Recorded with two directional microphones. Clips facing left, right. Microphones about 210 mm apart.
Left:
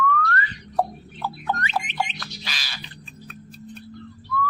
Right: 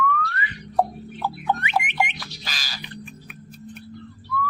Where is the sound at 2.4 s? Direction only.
45° right (ahead or behind).